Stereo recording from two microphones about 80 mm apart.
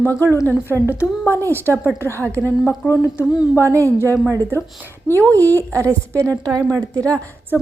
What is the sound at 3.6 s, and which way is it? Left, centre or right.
Speech, right.